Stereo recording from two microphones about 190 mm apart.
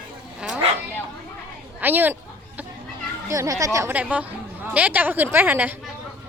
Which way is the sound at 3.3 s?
15° right (ahead or behind).